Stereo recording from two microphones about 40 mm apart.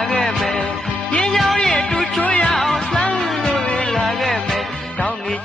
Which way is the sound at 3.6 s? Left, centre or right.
Left.